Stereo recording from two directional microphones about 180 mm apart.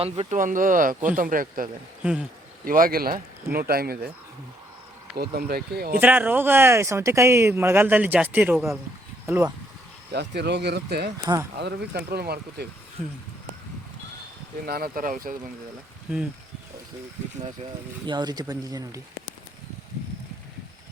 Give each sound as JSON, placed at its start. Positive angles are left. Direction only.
{"t": 0.0, "sound": "speech", "side_deg": -35}
{"t": 0.3, "sound": "speech", "side_deg": -45}
{"t": 5.1, "sound": "speech", "side_deg": -55}
{"t": 6.0, "sound": "speech", "side_deg": -10}
{"t": 10.1, "sound": "speech", "side_deg": -65}
{"t": 14.6, "sound": "speech", "side_deg": -55}
{"t": 18.0, "sound": "speech", "side_deg": -25}